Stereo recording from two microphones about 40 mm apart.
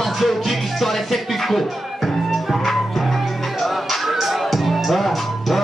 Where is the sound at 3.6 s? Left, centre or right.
Centre.